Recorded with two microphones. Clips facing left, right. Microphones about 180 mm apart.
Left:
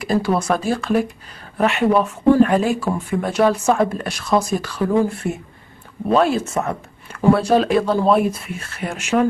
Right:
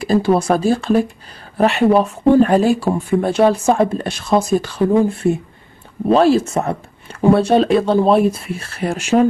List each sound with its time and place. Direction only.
0.0 s speech: 30° right (ahead or behind)